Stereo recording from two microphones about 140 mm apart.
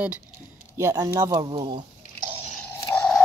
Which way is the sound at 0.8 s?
20° right (ahead or behind).